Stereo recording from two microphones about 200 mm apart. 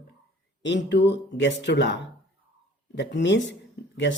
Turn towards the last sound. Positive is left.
turn(degrees=60)  # may be behind; listen again after turning